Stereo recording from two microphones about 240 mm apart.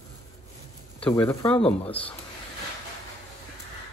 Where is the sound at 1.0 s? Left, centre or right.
Centre.